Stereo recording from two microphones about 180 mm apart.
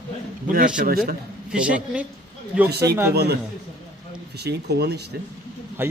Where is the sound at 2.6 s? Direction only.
65° right (ahead or behind).